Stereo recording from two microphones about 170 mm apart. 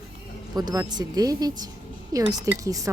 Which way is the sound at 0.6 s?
25° right (ahead or behind).